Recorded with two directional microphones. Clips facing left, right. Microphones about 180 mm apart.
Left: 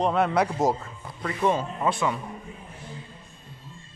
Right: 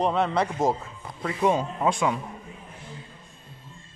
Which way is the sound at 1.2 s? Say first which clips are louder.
Right 1 dB; 10° right (ahead or behind).